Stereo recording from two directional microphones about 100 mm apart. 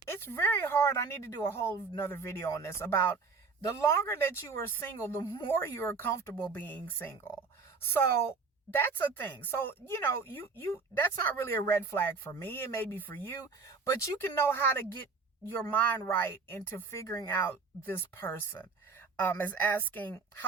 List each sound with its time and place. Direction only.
0.1 s speech: 20° left (ahead or behind)
5.5 s speech: 25° left (ahead or behind)
8.7 s speech: 20° left (ahead or behind)
16.0 s speech: 25° left (ahead or behind)